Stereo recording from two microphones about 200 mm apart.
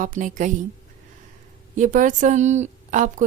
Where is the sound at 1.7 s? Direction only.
40° right (ahead or behind).